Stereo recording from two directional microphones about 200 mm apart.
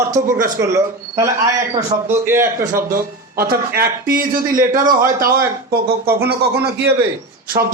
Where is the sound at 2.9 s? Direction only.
50° right (ahead or behind).